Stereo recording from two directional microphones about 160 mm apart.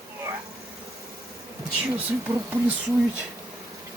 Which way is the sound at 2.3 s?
20° right (ahead or behind).